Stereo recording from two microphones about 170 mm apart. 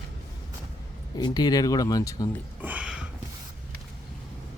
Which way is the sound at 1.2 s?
25° left (ahead or behind).